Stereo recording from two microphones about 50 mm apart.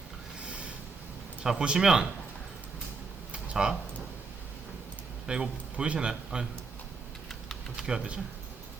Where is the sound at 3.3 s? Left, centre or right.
Right.